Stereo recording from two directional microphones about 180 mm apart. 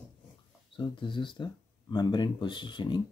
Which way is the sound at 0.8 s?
25° left (ahead or behind).